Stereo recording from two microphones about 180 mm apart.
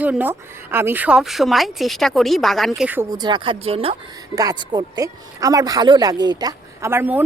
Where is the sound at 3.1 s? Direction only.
25° right (ahead or behind).